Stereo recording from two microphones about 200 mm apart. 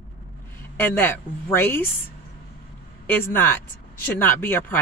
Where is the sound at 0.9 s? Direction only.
10° left (ahead or behind).